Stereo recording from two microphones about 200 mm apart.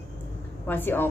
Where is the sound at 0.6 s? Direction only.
10° left (ahead or behind).